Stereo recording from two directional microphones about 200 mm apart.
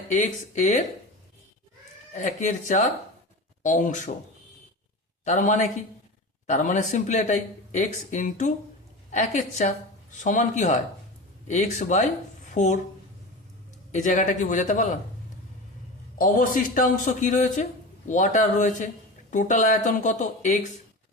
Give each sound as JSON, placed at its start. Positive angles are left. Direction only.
{"t": 0.1, "sound": "speech", "side_deg": 35}
{"t": 2.1, "sound": "speech", "side_deg": 40}
{"t": 5.2, "sound": "speech", "side_deg": 35}
{"t": 13.9, "sound": "speech", "side_deg": 40}
{"t": 16.1, "sound": "speech", "side_deg": 40}